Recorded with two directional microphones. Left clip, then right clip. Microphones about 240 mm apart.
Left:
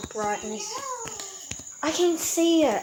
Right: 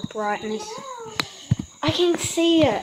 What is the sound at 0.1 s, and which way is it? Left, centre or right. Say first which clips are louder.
Speech: right 3 dB; centre.